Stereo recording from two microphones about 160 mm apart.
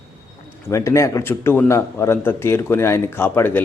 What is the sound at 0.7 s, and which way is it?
Speech, 20° left (ahead or behind).